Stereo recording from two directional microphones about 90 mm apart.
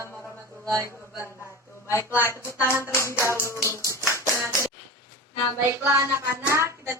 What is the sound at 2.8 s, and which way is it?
Music, 30° left (ahead or behind).